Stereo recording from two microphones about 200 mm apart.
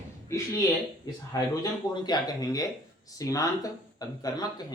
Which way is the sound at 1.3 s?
20° left (ahead or behind).